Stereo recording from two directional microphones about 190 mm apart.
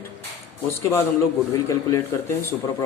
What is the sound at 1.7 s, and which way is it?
Speech, 15° left (ahead or behind).